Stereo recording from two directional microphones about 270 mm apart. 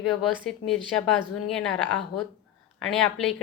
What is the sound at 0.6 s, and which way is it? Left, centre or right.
Speech, left.